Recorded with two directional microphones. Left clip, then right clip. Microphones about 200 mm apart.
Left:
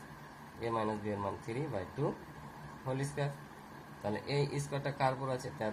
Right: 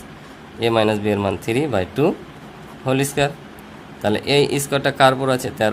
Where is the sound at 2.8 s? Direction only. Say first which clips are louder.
Right 19 dB; 90° right.